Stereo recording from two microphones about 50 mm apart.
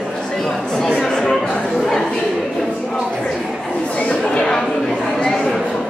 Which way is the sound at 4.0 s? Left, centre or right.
Left.